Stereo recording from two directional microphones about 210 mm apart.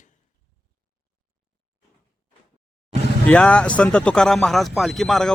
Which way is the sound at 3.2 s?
5° left (ahead or behind).